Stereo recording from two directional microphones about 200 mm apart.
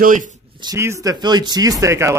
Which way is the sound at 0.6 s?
15° right (ahead or behind).